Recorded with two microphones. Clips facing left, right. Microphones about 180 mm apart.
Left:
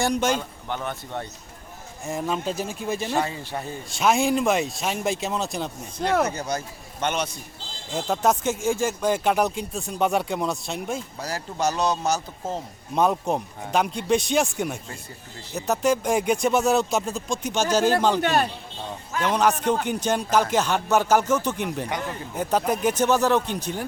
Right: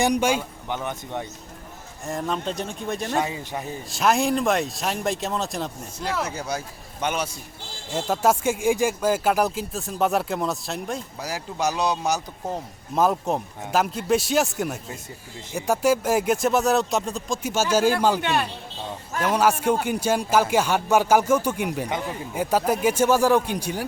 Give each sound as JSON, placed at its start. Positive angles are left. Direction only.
{"t": 0.0, "sound": "speech", "side_deg": -15}
{"t": 2.0, "sound": "speech", "side_deg": 0}
{"t": 3.2, "sound": "speech", "side_deg": -15}
{"t": 3.8, "sound": "speech", "side_deg": 0}
{"t": 6.0, "sound": "speech", "side_deg": 55}
{"t": 6.3, "sound": "speech", "side_deg": -10}
{"t": 12.9, "sound": "speech", "side_deg": 0}
{"t": 18.2, "sound": "speech", "side_deg": 40}
{"t": 19.2, "sound": "speech", "side_deg": -10}